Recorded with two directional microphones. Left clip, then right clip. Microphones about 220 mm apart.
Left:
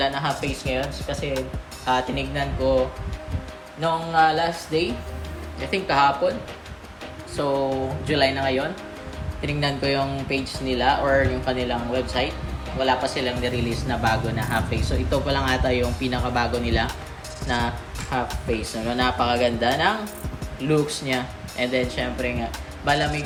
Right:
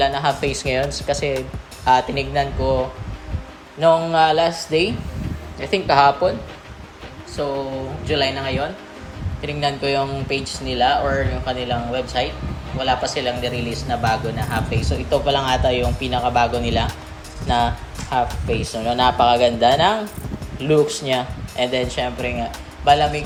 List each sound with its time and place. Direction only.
0.0 s speech: 10° right (ahead or behind)
0.6 s mantra: 30° right (ahead or behind)
3.8 s mantra: 25° right (ahead or behind)
7.4 s speech: centre (ahead or behind)